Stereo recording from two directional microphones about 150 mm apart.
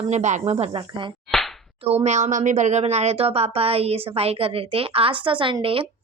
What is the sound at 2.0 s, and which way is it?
A woman's voice, 50° right (ahead or behind).